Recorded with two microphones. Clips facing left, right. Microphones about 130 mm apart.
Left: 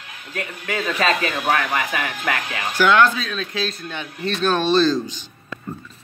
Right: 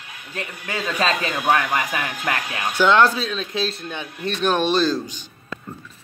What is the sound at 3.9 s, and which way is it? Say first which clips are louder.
A man's voice: left 1 dB; 15° right (ahead or behind).